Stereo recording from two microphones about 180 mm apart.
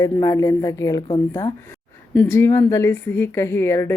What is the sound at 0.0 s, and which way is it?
A woman's voice, 20° left (ahead or behind).